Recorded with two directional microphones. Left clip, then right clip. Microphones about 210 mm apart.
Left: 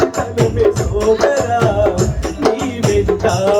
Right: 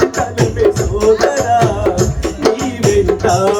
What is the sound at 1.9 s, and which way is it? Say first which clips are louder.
Music: right 2 dB; 20° right (ahead or behind).